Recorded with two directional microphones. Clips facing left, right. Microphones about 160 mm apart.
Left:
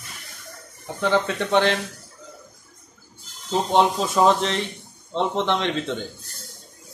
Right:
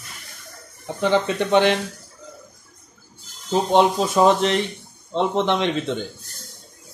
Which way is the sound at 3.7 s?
15° right (ahead or behind).